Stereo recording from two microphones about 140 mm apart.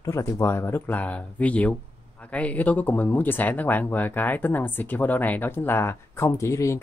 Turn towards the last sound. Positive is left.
turn(degrees=20)  # may be behind; listen again after turning